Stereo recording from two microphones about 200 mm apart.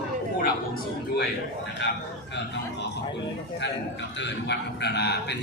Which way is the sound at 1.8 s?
60° left (ahead or behind).